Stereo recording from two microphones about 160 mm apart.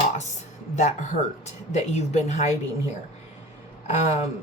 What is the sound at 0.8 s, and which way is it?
Speech, 50° left (ahead or behind).